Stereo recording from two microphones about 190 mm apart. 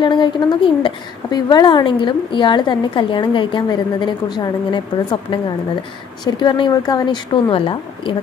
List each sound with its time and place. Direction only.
0.0 s a woman's voice: 25° left (ahead or behind)